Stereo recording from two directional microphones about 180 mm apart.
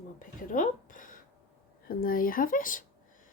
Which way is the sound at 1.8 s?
55° left (ahead or behind).